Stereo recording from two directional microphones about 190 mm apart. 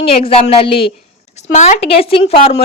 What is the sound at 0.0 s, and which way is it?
A woman's voice, 30° left (ahead or behind).